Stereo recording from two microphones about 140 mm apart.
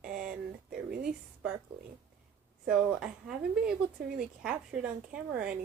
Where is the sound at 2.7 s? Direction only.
5° right (ahead or behind).